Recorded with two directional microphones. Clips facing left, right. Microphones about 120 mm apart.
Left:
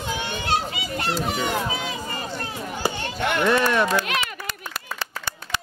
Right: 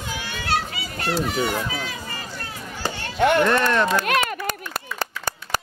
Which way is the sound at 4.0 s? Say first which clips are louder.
Right 4 dB; 50° right (ahead or behind).